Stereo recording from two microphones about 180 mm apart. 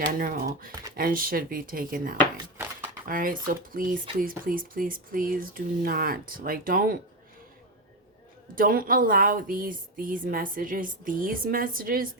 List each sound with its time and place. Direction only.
0.0 s speech: 50° right (ahead or behind)
8.5 s speech: 50° right (ahead or behind)